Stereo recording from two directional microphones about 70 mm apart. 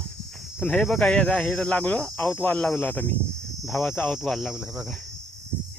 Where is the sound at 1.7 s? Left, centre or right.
Centre.